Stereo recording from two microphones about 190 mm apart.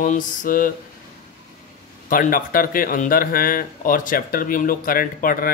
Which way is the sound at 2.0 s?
45° left (ahead or behind).